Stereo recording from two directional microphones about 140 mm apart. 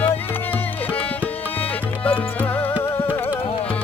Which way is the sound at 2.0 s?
10° left (ahead or behind).